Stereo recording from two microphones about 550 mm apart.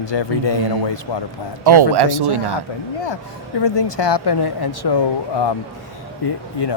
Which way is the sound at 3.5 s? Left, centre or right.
Left.